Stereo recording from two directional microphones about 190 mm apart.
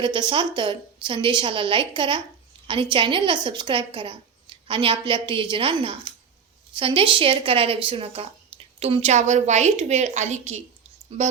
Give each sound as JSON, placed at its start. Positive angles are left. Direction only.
{"t": 0.0, "sound": "a woman's voice", "side_deg": -25}